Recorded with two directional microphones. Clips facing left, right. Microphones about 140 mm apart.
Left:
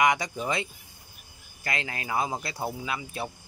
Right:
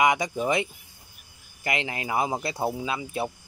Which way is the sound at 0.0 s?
20° right (ahead or behind).